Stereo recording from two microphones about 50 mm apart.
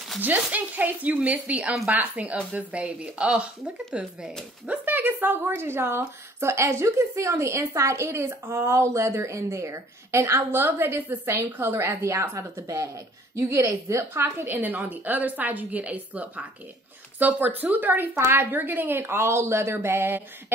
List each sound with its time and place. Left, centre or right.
0.2 s a woman's voice: right
1.5 s speech: centre
1.9 s speech: right
4.8 s a woman's voice: right
10.6 s a woman's voice: right
11.8 s a woman's voice: right
14.6 s a woman's voice: right